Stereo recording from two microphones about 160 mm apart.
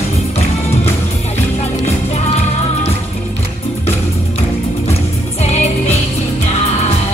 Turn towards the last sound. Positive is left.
turn(degrees=40)  # may be behind; listen again after turning